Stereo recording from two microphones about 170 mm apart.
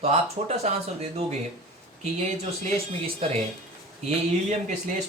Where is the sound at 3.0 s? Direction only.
35° right (ahead or behind).